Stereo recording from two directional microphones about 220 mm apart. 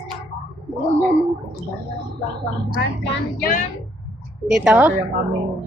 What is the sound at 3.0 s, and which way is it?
Speech, 40° left (ahead or behind).